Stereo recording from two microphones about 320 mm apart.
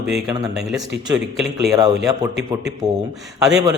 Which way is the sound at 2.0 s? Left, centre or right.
Right.